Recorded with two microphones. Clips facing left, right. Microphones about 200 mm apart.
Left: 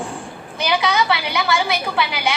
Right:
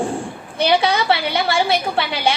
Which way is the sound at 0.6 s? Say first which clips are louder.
Right 3 dB; 30° right (ahead or behind).